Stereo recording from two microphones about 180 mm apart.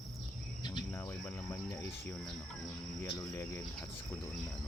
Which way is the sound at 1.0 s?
10° left (ahead or behind).